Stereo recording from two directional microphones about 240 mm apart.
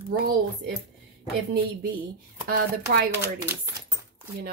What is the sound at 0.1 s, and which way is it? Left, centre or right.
Speech, right.